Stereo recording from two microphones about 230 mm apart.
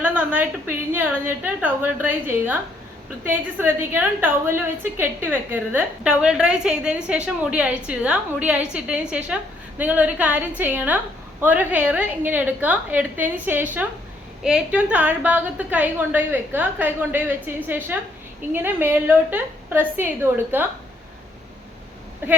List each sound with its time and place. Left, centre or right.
0.0 s a woman's voice: centre
22.2 s a woman's voice: centre